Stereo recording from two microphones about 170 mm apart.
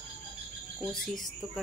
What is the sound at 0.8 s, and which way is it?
Speech, centre (ahead or behind).